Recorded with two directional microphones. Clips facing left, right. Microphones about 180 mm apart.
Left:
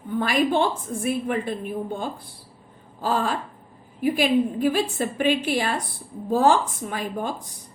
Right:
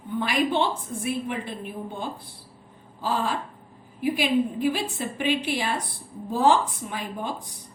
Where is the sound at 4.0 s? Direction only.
45° left (ahead or behind).